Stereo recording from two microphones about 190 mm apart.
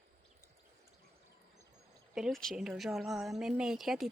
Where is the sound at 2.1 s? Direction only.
Centre (ahead or behind).